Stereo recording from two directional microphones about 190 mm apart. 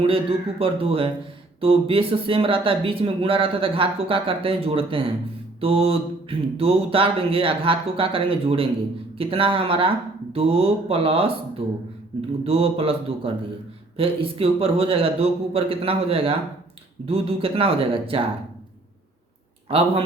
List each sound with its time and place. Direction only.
0.0 s speech: 30° right (ahead or behind)
19.6 s a man's voice: 30° right (ahead or behind)